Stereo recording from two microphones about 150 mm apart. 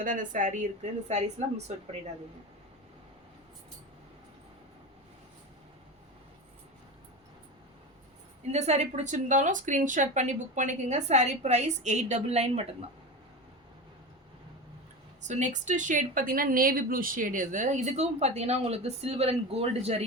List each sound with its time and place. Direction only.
0.0 s a woman's voice: 60° right (ahead or behind)
8.5 s a woman's voice: 45° right (ahead or behind)
15.2 s a woman's voice: 55° right (ahead or behind)